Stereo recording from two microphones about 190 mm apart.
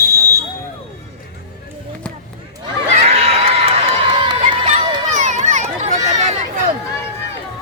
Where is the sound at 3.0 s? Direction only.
30° right (ahead or behind).